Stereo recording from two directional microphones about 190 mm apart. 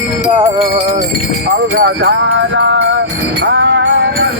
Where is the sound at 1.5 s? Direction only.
55° right (ahead or behind).